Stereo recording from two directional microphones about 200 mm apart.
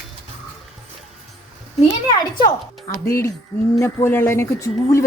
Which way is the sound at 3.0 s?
15° left (ahead or behind).